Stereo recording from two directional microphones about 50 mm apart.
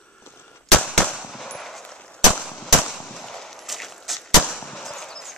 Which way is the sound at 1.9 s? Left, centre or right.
Left.